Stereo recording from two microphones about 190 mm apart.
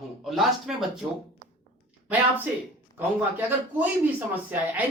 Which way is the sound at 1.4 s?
20° right (ahead or behind).